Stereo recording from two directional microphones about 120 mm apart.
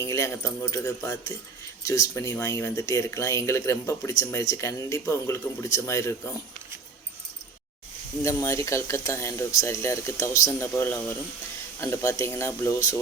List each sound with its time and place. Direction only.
0.0 s speech: 25° left (ahead or behind)
8.2 s speech: 25° left (ahead or behind)